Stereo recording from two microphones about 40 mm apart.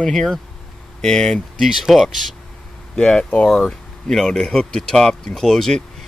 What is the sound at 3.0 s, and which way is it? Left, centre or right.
Speech, left.